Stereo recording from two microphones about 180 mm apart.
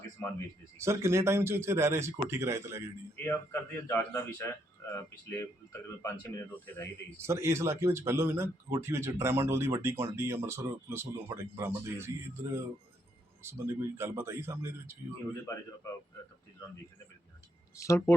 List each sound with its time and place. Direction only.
0.2 s speech: 15° left (ahead or behind)
0.8 s a man's voice: 15° right (ahead or behind)
3.2 s a man's voice: 10° left (ahead or behind)
7.2 s a man's voice: 15° right (ahead or behind)
13.4 s a man's voice: 10° right (ahead or behind)
17.7 s a man's voice: 15° left (ahead or behind)